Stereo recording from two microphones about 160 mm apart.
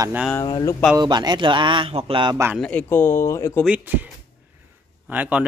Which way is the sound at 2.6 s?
10° left (ahead or behind).